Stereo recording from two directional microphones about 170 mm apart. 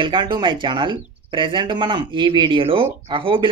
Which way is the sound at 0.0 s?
30° right (ahead or behind).